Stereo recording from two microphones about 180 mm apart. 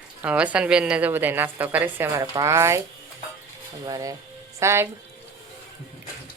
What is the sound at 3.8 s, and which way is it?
Speech, 20° right (ahead or behind).